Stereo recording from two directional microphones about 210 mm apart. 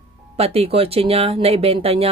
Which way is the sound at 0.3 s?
30° right (ahead or behind).